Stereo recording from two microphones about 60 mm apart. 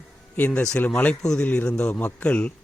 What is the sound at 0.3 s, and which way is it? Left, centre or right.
A man's voice, left.